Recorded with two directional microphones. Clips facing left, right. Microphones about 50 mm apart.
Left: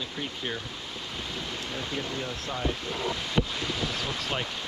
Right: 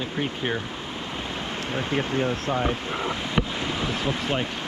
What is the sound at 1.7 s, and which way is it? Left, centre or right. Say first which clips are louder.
Speech: right 9 dB; right.